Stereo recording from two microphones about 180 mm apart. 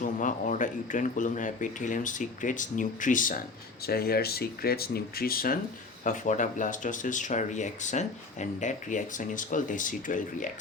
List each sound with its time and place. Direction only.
0.0 s speech: 45° left (ahead or behind)
3.8 s speech: 60° left (ahead or behind)
6.1 s speech: 45° left (ahead or behind)